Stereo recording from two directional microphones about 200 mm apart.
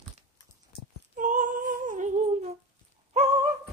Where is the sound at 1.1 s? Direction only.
40° right (ahead or behind).